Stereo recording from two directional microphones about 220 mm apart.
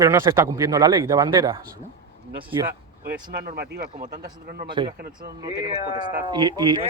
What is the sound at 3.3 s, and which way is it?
Speech, 45° right (ahead or behind).